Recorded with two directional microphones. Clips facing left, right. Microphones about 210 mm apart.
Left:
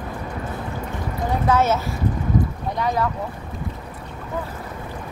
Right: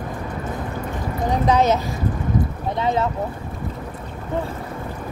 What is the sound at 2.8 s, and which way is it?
Speech, 25° right (ahead or behind).